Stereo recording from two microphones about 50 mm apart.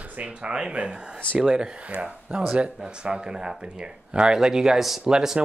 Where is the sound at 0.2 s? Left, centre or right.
Right.